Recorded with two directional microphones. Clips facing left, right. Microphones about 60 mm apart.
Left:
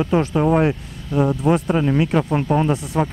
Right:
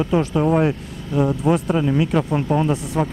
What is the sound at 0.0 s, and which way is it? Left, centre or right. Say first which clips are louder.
Speech: left 1 dB; left.